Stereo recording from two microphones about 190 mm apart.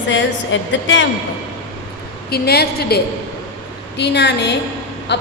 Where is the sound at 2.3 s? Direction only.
55° left (ahead or behind).